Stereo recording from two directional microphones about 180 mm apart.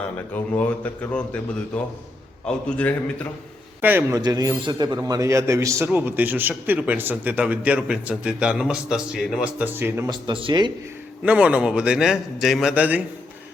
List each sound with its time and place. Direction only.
0.3 s a man's voice: 10° left (ahead or behind)
3.8 s a man's voice: 10° right (ahead or behind)
4.2 s a man's voice: 20° right (ahead or behind)
10.1 s a man's voice: 30° right (ahead or behind)
11.2 s a man's voice: 5° right (ahead or behind)